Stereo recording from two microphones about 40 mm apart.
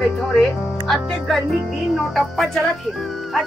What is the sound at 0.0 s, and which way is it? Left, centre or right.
Speech, centre.